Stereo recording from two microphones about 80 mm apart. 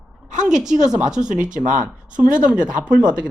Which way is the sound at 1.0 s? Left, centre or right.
Centre.